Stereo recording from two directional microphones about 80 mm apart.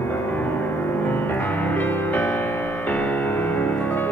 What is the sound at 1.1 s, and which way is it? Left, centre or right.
Music, left.